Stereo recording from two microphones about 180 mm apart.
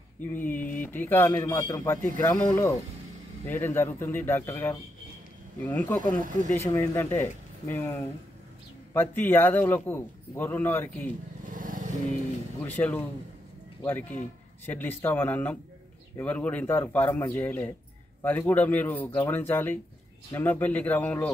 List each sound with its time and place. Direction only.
0.2 s a man's voice: 10° left (ahead or behind)
8.9 s a man's voice: 10° left (ahead or behind)
11.5 s vehicle: 50° right (ahead or behind)
12.6 s a man's voice: 10° left (ahead or behind)